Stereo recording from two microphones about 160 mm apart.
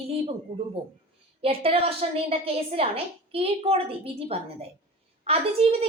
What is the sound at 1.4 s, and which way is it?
A woman's voice, 35° right (ahead or behind).